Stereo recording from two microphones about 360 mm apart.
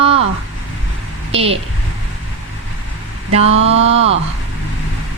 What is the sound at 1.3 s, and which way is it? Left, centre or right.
Speech, centre.